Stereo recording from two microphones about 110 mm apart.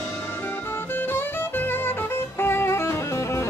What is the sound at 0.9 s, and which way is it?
Music, 20° left (ahead or behind).